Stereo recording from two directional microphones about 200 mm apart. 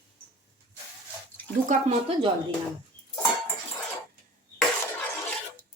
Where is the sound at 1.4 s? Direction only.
10° left (ahead or behind).